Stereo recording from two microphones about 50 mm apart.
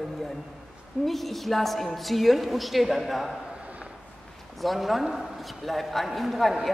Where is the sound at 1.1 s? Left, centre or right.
Centre.